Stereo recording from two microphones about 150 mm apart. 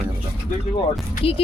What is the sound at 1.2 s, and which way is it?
Speech, 40° left (ahead or behind).